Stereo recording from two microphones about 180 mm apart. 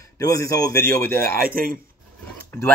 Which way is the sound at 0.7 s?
55° right (ahead or behind).